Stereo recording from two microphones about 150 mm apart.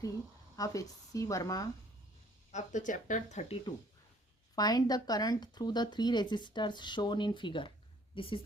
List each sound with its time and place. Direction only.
0.5 s speech: 25° left (ahead or behind)
2.5 s speech: 55° left (ahead or behind)
4.5 s speech: 25° left (ahead or behind)